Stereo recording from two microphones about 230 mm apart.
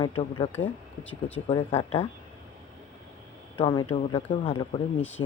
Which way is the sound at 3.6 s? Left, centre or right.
Left.